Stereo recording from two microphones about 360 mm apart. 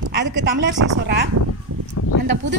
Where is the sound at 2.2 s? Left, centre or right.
Right.